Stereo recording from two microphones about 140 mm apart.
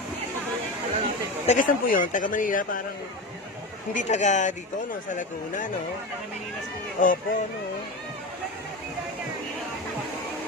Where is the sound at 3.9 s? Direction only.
60° left (ahead or behind).